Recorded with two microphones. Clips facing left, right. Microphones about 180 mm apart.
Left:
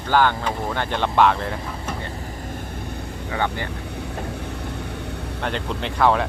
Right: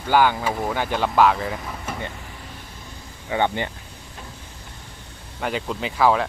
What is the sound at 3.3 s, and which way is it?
Speech, 20° right (ahead or behind).